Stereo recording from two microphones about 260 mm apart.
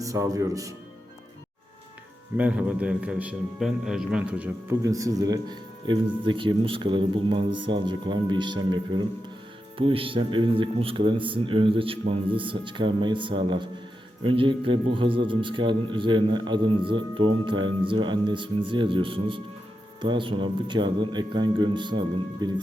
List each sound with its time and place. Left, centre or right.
0.0 s speech: centre
2.4 s a man's voice: centre